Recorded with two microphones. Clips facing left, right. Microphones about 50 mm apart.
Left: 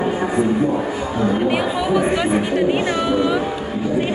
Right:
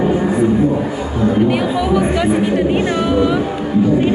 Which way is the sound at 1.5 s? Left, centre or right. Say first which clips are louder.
Right 3 dB; centre.